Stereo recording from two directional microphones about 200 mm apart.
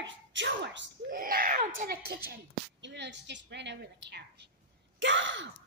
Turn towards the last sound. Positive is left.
turn(degrees=-65)  # may be behind; listen again after turning